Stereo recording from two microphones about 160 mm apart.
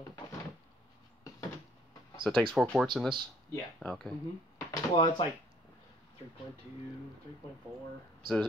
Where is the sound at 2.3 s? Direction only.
5° left (ahead or behind).